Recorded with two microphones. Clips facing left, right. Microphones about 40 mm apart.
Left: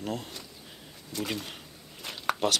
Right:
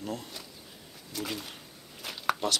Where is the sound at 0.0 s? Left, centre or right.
Centre.